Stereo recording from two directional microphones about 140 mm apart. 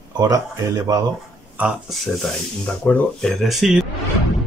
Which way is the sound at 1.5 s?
5° right (ahead or behind).